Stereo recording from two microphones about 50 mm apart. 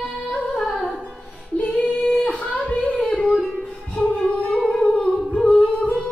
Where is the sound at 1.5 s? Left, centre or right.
Left.